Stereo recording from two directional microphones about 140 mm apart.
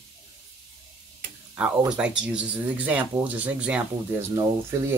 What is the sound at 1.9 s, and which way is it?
Speech, 5° right (ahead or behind).